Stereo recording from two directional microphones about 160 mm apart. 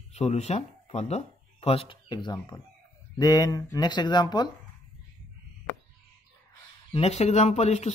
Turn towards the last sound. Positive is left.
turn(degrees=45)  # may be behind; listen again after turning